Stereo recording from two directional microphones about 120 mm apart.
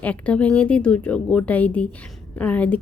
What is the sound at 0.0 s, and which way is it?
Speech, 10° left (ahead or behind).